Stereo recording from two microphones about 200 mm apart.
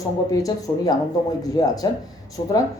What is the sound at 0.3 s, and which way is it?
Speech, 15° left (ahead or behind).